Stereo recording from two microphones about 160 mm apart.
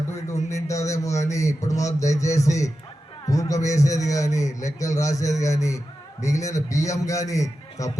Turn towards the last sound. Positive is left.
turn(degrees=20)  # may be behind; listen again after turning